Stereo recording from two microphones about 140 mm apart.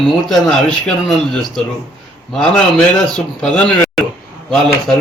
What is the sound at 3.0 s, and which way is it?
A man's voice, 5° left (ahead or behind).